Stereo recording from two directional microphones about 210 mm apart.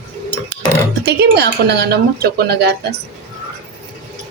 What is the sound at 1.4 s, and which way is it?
Speech, 50° right (ahead or behind).